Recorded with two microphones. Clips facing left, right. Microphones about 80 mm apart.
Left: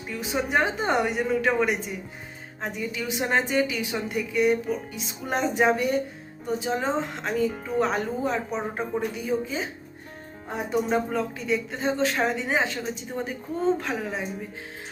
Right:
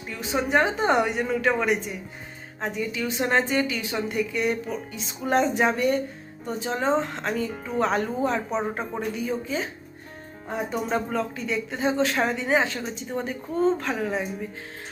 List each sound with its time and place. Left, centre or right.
0.1 s a woman's voice: centre
10.7 s a woman's voice: centre